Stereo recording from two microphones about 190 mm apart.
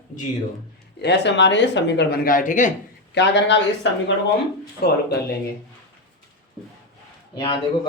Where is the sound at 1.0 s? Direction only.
65° left (ahead or behind); by 2.7 s 45° left (ahead or behind).